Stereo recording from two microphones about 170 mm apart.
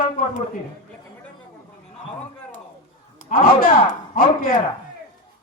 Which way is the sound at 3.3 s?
55° left (ahead or behind).